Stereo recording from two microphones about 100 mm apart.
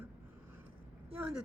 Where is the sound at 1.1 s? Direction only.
15° right (ahead or behind).